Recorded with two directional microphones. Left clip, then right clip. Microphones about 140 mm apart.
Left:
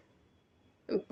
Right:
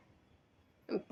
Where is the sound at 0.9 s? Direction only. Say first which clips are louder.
Left 5 dB; 15° left (ahead or behind).